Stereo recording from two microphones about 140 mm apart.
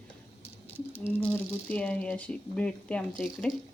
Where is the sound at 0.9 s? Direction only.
15° left (ahead or behind).